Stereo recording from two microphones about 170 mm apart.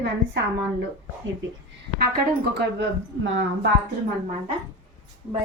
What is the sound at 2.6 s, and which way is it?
Speech, 90° right.